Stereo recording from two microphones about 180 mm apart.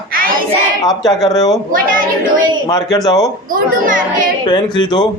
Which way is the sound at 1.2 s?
20° left (ahead or behind).